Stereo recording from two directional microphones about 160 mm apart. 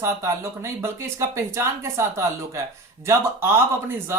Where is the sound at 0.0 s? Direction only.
15° right (ahead or behind).